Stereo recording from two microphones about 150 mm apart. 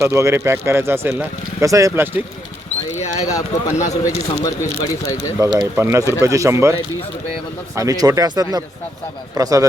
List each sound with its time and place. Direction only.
0.0 s speech: 20° right (ahead or behind)
3.2 s speech: 20° left (ahead or behind)
5.4 s speech: 20° right (ahead or behind)
7.8 s speech: 25° right (ahead or behind)